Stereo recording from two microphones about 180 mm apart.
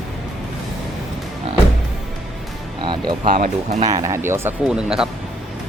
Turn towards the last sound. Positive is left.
turn(degrees=-5)  # may be behind; listen again after turning